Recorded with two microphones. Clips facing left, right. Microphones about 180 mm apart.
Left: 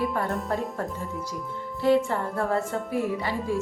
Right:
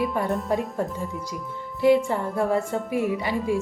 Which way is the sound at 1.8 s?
15° right (ahead or behind).